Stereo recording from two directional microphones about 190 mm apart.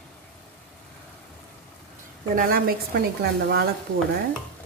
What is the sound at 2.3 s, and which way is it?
A woman's voice, 50° right (ahead or behind).